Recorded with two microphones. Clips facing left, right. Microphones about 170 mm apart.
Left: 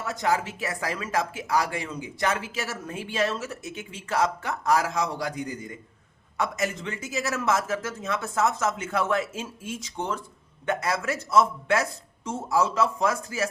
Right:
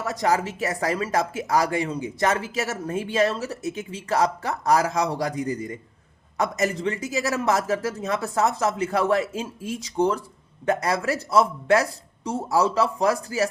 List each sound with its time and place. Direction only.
0.0 s speech: 40° right (ahead or behind)
5.3 s a man's voice: centre (ahead or behind)
6.3 s speech: 40° right (ahead or behind)